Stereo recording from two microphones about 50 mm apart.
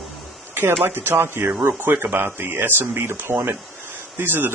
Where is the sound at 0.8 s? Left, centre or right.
Right.